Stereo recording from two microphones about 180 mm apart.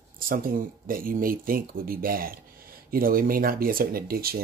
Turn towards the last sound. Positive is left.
turn(degrees=-55)  # may be behind; listen again after turning